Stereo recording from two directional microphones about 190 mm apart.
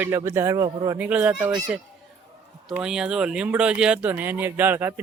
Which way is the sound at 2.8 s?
5° right (ahead or behind).